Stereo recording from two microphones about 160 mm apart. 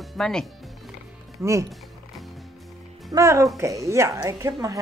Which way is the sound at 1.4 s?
20° right (ahead or behind).